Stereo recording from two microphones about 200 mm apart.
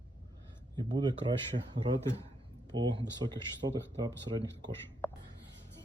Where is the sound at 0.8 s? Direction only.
20° right (ahead or behind).